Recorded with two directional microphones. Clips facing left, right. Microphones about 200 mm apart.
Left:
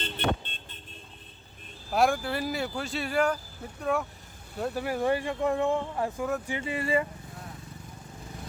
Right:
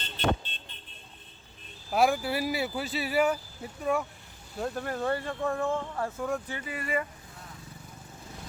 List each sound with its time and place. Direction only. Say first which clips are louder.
0.0 s vehicle: even; 55° left (ahead or behind)
1.9 s speech: even; centre (ahead or behind); by 7.1 s 25° left (ahead or behind)